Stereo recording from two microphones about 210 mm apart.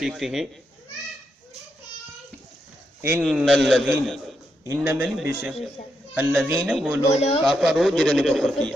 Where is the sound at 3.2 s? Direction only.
Centre (ahead or behind).